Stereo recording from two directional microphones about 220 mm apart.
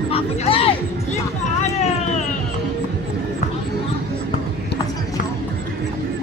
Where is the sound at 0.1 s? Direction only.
25° left (ahead or behind).